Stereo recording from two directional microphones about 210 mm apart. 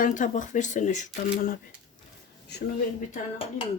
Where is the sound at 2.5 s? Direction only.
55° left (ahead or behind).